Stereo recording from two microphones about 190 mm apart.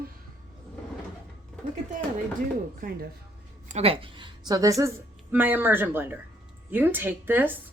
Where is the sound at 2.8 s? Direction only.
45° right (ahead or behind).